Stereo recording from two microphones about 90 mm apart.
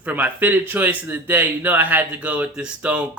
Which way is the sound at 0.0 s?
20° right (ahead or behind).